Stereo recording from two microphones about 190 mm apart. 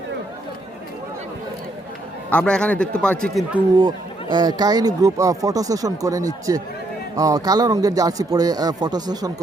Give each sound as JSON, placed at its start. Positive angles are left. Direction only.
{"t": 2.3, "sound": "speech", "side_deg": 5}
{"t": 3.8, "sound": "speech", "side_deg": -20}